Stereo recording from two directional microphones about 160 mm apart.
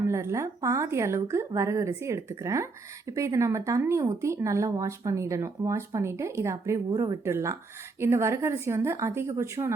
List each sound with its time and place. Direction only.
0.0 s a woman's voice: 15° right (ahead or behind)